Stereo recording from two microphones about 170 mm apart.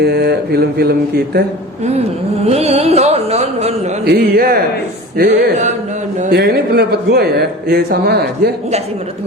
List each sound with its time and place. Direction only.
0.0 s speech: 70° right (ahead or behind)
2.5 s music: 35° right (ahead or behind)
4.0 s speech: 65° right (ahead or behind)